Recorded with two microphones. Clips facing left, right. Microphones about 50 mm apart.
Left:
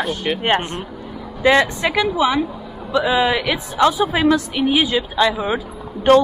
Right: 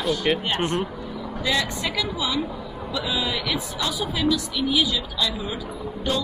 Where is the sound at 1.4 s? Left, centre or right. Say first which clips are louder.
Left 10 dB; left.